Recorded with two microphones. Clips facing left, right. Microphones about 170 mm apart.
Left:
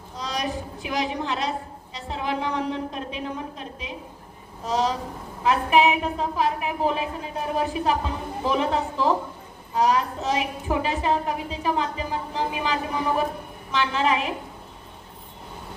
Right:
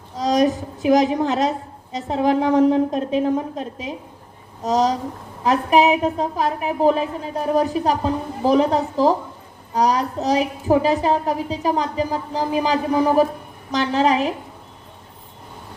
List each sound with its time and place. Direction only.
0.2 s a woman's voice: 45° right (ahead or behind)